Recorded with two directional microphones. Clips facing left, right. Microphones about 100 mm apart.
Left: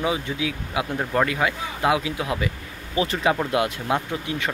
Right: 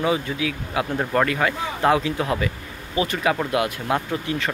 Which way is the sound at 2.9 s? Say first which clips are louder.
Even; 25° left (ahead or behind).